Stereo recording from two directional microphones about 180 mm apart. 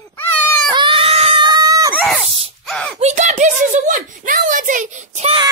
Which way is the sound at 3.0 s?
40° right (ahead or behind).